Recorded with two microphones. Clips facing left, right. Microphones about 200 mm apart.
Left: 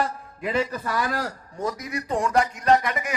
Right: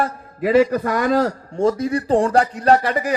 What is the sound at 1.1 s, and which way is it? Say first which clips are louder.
A man's voice: right 11 dB; 25° right (ahead or behind).